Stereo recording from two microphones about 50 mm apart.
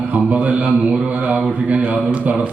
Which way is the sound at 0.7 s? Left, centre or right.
Centre.